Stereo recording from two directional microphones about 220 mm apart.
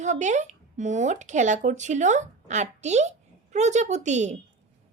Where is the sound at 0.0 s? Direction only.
35° right (ahead or behind).